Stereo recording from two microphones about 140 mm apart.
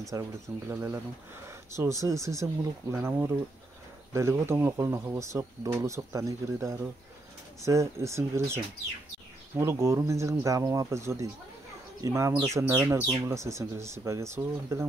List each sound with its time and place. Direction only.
0.1 s speech: 15° right (ahead or behind)
9.6 s speech: 20° right (ahead or behind)